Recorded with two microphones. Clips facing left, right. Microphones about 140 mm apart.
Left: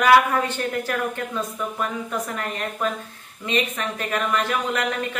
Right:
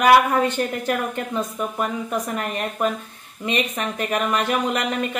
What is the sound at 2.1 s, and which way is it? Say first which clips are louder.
Speech: right 3 dB; 20° right (ahead or behind).